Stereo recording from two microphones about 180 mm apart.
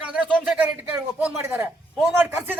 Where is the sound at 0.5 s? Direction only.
10° right (ahead or behind).